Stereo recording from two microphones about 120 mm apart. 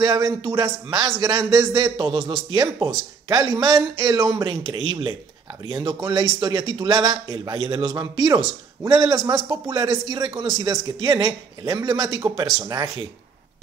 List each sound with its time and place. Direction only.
0.0 s a man's voice: 35° right (ahead or behind)
2.0 s a man's voice: 45° right (ahead or behind); by 4.5 s 30° right (ahead or behind)
4.5 s a man's voice: 45° right (ahead or behind)
9.5 s a man's voice: 40° right (ahead or behind)